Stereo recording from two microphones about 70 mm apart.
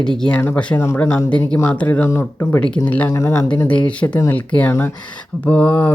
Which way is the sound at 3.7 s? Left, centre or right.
Centre.